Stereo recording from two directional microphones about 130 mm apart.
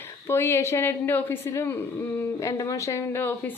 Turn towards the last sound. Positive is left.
turn(degrees=15)  # may be behind; listen again after turning